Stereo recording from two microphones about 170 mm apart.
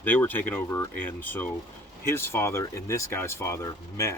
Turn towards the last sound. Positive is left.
turn(degrees=15)  # may be behind; listen again after turning